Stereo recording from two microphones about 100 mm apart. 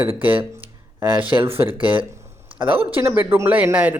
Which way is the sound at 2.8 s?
20° right (ahead or behind).